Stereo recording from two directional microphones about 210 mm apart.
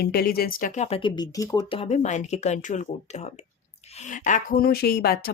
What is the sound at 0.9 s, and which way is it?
Speech, 25° left (ahead or behind).